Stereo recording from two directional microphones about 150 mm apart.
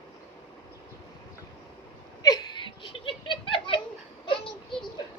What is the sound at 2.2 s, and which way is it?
Laughter, 25° left (ahead or behind).